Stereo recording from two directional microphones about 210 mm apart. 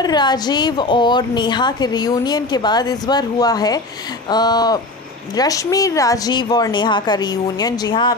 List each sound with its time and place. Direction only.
0.0 s a woman's voice: 20° left (ahead or behind)